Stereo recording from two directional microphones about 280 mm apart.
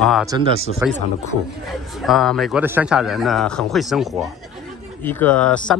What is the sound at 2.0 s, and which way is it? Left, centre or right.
Speech, centre.